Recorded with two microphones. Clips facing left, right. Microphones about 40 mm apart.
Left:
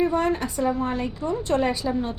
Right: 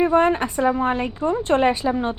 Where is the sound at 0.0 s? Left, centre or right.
Right.